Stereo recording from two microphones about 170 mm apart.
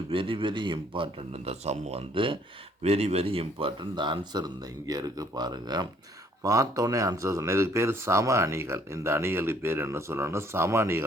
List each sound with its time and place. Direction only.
0.1 s a man's voice: 30° right (ahead or behind); by 11.0 s 15° right (ahead or behind)